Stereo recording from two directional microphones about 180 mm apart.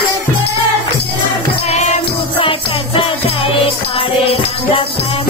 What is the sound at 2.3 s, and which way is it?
Music, 30° left (ahead or behind).